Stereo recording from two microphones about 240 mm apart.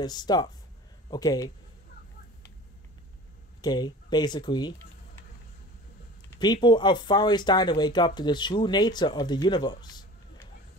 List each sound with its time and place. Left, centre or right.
0.0 s speech: centre
3.6 s speech: centre
6.4 s speech: centre